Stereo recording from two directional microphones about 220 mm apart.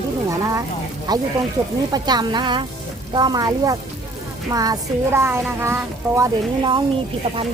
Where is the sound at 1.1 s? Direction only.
15° right (ahead or behind).